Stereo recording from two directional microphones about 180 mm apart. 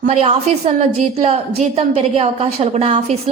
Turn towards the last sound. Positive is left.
turn(degrees=-35)  # may be behind; listen again after turning